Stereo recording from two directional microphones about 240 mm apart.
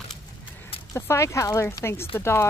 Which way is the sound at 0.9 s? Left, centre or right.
Centre.